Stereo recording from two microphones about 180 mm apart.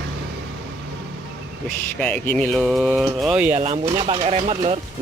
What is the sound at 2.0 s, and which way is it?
Speech, 5° left (ahead or behind).